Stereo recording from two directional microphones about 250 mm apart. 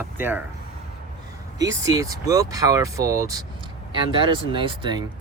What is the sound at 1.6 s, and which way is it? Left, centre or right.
Speech, centre.